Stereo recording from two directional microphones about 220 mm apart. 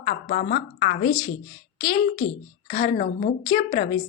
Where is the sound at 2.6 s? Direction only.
40° left (ahead or behind).